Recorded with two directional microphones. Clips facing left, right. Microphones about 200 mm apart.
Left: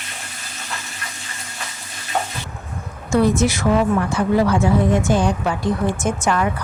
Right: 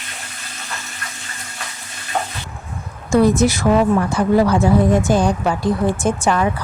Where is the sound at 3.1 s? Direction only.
40° right (ahead or behind).